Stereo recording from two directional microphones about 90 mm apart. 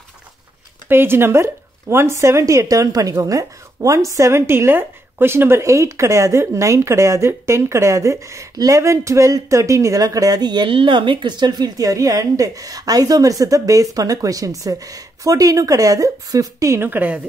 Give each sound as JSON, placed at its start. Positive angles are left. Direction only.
{"t": 0.8, "sound": "speech", "side_deg": -25}
{"t": 10.7, "sound": "speech", "side_deg": -70}